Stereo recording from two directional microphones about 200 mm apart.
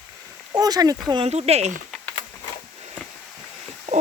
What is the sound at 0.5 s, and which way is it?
Speech, 20° right (ahead or behind).